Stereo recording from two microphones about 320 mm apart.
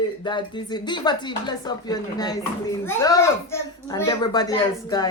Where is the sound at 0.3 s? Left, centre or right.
Centre.